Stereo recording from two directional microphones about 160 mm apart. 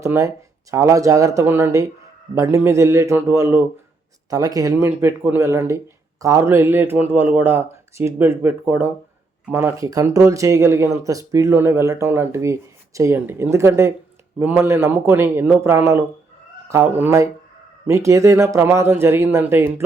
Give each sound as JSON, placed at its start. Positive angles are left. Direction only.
{"t": 0.0, "sound": "speech", "side_deg": -20}